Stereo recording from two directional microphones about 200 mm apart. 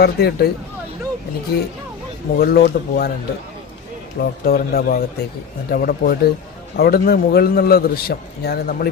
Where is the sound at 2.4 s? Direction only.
50° left (ahead or behind).